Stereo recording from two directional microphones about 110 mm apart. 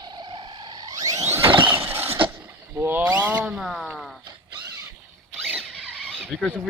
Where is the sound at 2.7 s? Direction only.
20° right (ahead or behind); by 4.1 s centre (ahead or behind).